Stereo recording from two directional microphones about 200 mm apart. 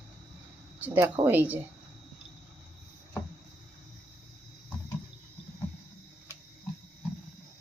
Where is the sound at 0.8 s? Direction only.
10° right (ahead or behind).